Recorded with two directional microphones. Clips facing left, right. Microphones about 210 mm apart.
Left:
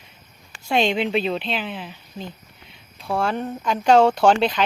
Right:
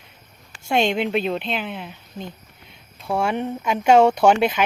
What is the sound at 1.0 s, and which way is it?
Speech, 5° right (ahead or behind).